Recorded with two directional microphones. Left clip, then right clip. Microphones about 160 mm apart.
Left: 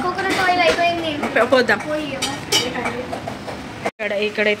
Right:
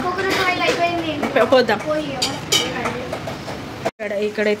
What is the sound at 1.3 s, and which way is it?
Speech, 15° right (ahead or behind).